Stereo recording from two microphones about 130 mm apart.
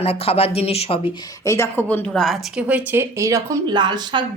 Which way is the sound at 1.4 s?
20° left (ahead or behind).